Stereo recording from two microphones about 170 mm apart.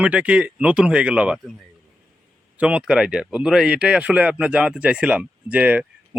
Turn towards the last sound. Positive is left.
turn(degrees=-10)  # may be behind; listen again after turning